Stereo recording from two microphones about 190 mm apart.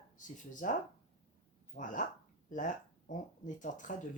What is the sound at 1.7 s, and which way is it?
Speech, 45° left (ahead or behind).